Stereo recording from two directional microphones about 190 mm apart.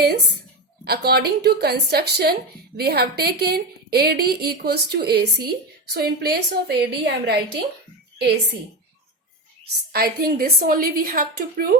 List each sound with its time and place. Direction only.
0.9 s a woman's voice: 60° right (ahead or behind)
9.9 s a woman's voice: 55° right (ahead or behind)